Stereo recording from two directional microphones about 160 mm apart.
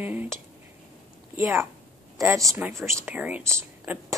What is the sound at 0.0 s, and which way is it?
Speech, 10° right (ahead or behind).